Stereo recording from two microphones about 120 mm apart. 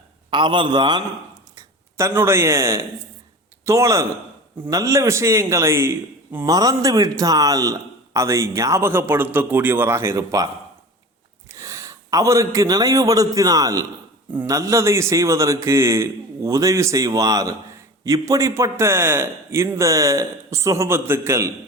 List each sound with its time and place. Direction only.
0.3 s a man's voice: 40° right (ahead or behind)
1.5 s a man's voice: 25° right (ahead or behind)